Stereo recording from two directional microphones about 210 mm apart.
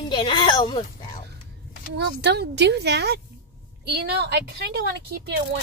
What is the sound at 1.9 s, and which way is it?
Speech, 50° right (ahead or behind).